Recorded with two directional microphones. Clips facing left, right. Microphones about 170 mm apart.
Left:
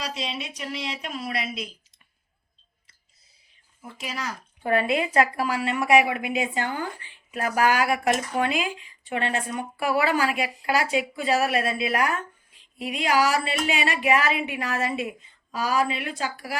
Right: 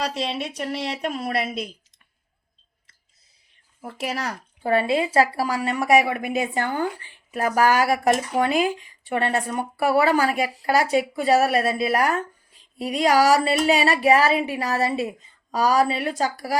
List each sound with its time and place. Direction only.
0.0 s a woman's voice: 60° right (ahead or behind)
3.9 s a woman's voice: 65° right (ahead or behind)
4.6 s speech: 30° right (ahead or behind)